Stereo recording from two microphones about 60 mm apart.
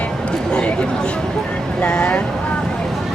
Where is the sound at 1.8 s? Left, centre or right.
Left.